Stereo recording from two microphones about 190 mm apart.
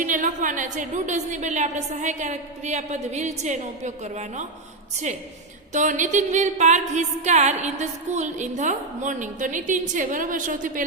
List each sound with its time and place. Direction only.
0.0 s a woman's voice: 40° right (ahead or behind)
5.7 s a woman's voice: 40° right (ahead or behind)